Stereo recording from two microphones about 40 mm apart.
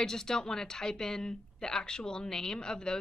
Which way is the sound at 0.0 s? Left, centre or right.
Centre.